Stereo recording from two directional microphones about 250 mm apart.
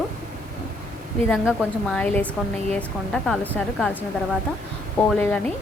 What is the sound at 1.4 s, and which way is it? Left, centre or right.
Speech, centre.